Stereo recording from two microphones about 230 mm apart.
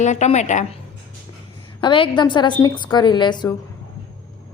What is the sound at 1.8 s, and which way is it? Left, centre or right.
Speech, left.